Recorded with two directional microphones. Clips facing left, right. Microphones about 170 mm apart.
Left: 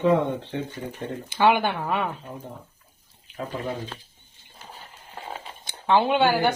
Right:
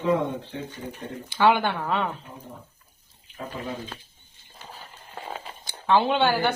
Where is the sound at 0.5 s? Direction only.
75° left (ahead or behind).